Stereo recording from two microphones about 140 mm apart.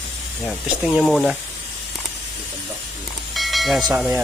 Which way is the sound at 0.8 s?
Centre (ahead or behind).